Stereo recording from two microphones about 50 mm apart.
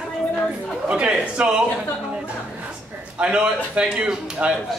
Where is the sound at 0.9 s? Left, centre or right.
Right.